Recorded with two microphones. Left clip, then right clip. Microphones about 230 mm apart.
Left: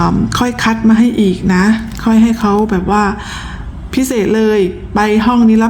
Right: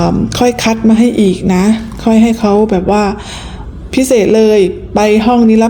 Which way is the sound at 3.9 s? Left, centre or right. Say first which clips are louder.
Right 5 dB; left.